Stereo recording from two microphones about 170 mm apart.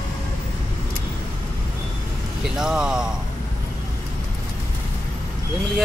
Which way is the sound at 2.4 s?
5° right (ahead or behind).